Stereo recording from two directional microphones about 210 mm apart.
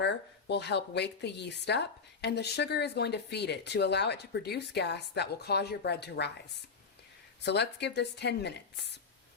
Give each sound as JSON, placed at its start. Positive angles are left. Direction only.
{"t": 0.0, "sound": "speech", "side_deg": 55}
{"t": 7.4, "sound": "speech", "side_deg": 55}